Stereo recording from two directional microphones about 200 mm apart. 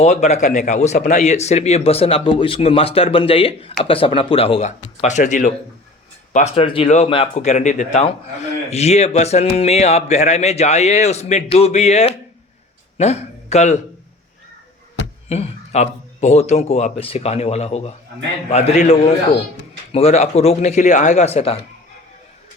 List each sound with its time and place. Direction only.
0.0 s a man's voice: 35° left (ahead or behind)
15.3 s speech: 35° left (ahead or behind)